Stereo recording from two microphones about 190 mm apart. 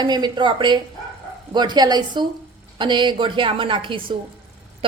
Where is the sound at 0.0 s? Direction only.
20° right (ahead or behind).